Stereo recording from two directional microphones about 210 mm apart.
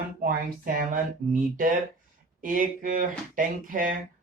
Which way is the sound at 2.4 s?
40° right (ahead or behind).